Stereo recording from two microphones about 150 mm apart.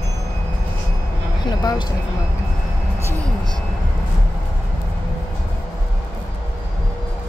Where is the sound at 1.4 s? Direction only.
25° left (ahead or behind).